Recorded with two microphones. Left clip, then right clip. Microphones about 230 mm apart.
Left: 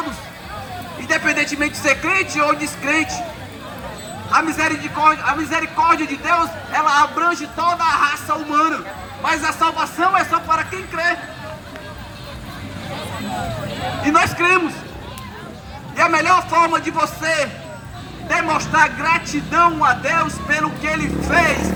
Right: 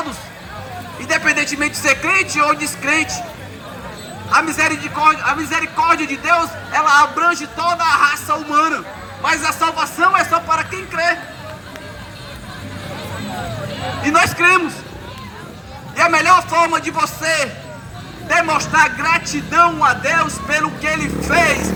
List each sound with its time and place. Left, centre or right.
1.0 s a man's voice: right
4.3 s a man's voice: right
14.0 s a man's voice: right
16.0 s a man's voice: right